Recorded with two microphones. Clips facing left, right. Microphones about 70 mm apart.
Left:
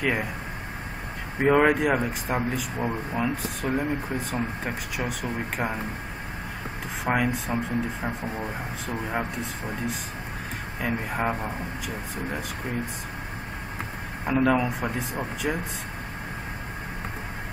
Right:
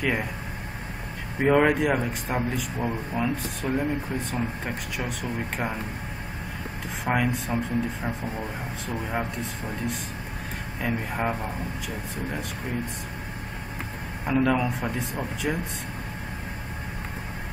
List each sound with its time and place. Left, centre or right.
0.0 s speech: centre
1.4 s speech: centre
7.1 s speech: centre
14.2 s speech: centre